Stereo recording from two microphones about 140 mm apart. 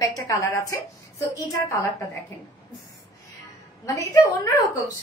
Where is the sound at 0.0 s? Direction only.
25° left (ahead or behind).